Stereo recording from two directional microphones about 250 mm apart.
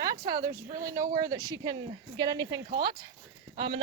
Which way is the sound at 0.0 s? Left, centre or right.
Centre.